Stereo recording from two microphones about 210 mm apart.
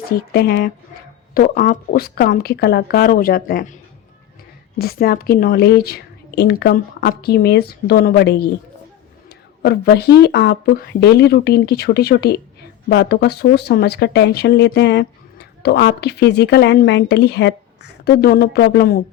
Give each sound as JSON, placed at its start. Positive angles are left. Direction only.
{"t": 0.3, "sound": "speech", "side_deg": 50}
{"t": 4.8, "sound": "speech", "side_deg": 45}
{"t": 9.6, "sound": "speech", "side_deg": 50}